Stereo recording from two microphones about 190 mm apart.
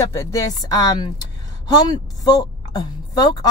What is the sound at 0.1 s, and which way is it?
A woman's voice, 15° left (ahead or behind).